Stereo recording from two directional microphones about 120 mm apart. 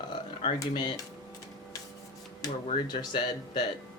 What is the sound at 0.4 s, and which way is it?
Speech, 40° left (ahead or behind).